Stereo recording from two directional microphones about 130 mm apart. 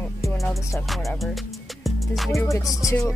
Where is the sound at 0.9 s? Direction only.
Centre (ahead or behind).